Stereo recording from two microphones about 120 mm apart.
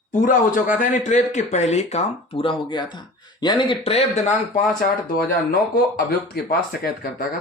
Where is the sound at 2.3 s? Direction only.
45° left (ahead or behind).